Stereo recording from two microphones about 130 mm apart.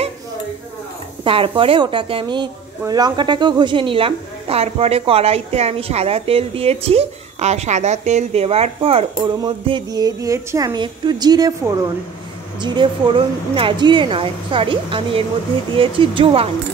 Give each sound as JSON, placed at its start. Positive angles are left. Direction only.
{"t": 1.2, "sound": "a woman's voice", "side_deg": -40}